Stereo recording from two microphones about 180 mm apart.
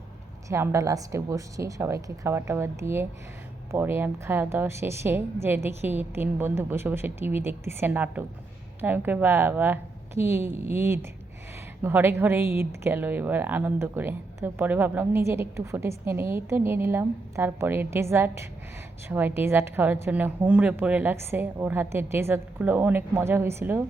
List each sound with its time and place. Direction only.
0.4 s speech: 15° right (ahead or behind)